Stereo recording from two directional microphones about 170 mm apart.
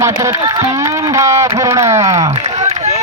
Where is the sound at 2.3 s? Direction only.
40° right (ahead or behind).